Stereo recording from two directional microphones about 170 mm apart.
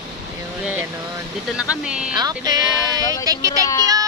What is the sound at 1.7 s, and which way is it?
Speech, 5° right (ahead or behind).